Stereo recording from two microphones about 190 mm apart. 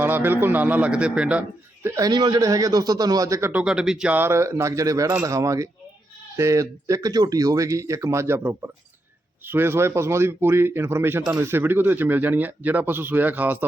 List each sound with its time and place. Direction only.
0.0 s a man's voice: 10° right (ahead or behind)
2.0 s a man's voice: 20° right (ahead or behind)